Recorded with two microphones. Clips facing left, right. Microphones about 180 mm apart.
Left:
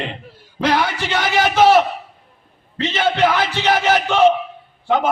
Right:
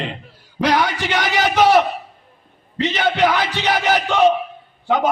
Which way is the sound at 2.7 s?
15° right (ahead or behind).